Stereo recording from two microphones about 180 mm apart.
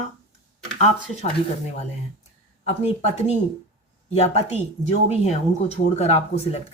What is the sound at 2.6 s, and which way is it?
Speech, 35° left (ahead or behind).